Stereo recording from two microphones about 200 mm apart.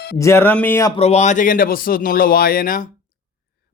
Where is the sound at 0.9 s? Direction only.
30° left (ahead or behind).